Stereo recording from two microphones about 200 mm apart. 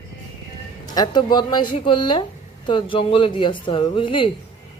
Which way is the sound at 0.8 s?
20° left (ahead or behind).